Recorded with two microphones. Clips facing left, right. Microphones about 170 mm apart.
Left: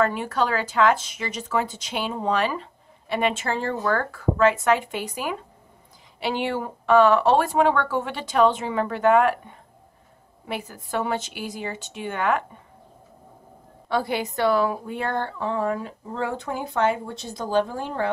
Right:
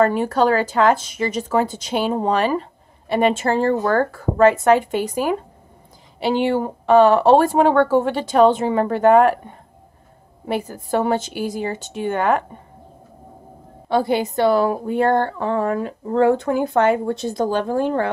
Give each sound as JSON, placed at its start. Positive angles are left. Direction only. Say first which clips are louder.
{"t": 0.0, "sound": "speech", "louder": "right 6 dB", "side_deg": -40}
{"t": 13.8, "sound": "a woman's voice", "louder": "right 6 dB", "side_deg": -30}
{"t": 14.7, "sound": "speech", "louder": "right 10 dB", "side_deg": -45}